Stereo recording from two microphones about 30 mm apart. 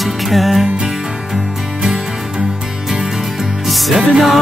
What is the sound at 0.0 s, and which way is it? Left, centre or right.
Music, centre.